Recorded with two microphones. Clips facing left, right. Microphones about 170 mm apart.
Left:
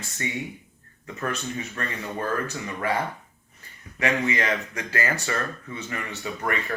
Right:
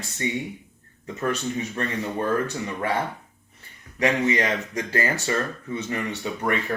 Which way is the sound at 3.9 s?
35° right (ahead or behind).